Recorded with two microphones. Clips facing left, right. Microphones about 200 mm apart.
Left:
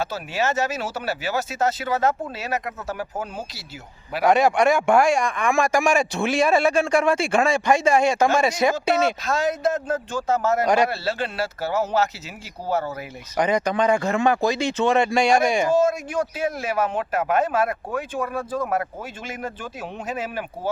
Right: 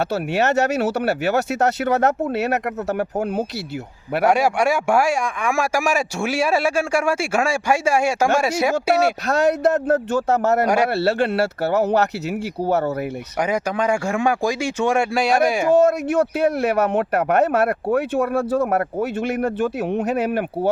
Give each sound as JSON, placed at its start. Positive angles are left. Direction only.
{"t": 0.0, "sound": "a man's voice", "side_deg": -65}
{"t": 4.3, "sound": "speech", "side_deg": -10}
{"t": 9.2, "sound": "a man's voice", "side_deg": -65}
{"t": 13.4, "sound": "speech", "side_deg": -10}
{"t": 15.6, "sound": "a man's voice", "side_deg": -65}